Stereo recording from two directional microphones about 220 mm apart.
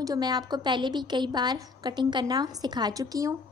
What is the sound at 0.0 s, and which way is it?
A woman's voice, 20° right (ahead or behind).